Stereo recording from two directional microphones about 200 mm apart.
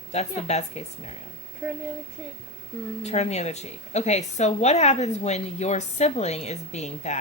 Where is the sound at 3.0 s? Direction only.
35° left (ahead or behind).